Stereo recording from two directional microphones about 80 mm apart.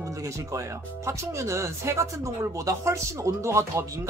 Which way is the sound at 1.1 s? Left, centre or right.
Right.